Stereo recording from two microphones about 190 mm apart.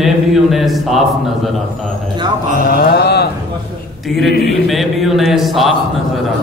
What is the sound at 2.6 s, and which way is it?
Mantra, 55° left (ahead or behind).